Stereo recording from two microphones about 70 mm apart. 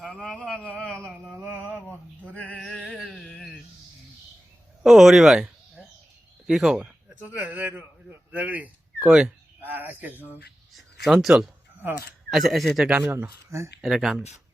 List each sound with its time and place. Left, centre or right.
0.1 s a sound: centre
1.0 s a sound: centre
1.5 s male singing: centre
4.8 s speech: centre
6.5 s speech: centre
6.7 s a man's voice: centre
9.6 s speech: right
10.8 s speech: centre
11.8 s speech: right
12.3 s speech: centre
12.9 s speech: right
13.5 s speech: right
13.8 s speech: centre